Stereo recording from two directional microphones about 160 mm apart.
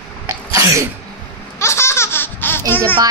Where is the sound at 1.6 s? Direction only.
15° left (ahead or behind).